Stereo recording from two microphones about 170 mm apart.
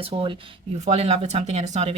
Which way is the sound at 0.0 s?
30° right (ahead or behind).